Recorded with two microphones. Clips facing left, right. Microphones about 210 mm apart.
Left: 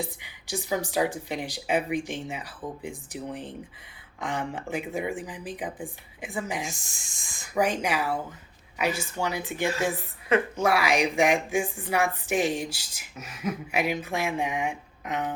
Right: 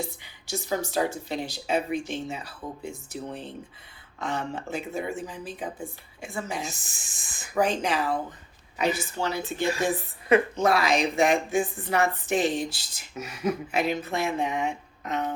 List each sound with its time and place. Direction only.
0.0 s speech: 15° left (ahead or behind)
6.9 s speech: 5° right (ahead or behind)
7.5 s speech: 10° left (ahead or behind)
13.7 s speech: 10° left (ahead or behind)